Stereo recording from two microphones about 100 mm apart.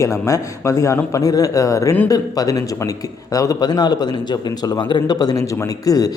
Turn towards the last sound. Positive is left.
turn(degrees=40)  # may be behind; listen again after turning